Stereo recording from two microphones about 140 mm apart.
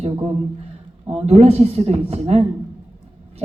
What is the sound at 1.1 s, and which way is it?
A woman's voice, 50° right (ahead or behind).